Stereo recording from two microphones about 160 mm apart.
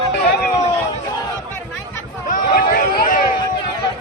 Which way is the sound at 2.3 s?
65° left (ahead or behind).